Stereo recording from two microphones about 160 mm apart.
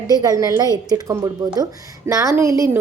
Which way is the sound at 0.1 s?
25° right (ahead or behind).